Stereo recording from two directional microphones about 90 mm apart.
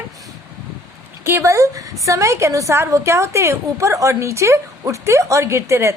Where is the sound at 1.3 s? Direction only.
30° right (ahead or behind).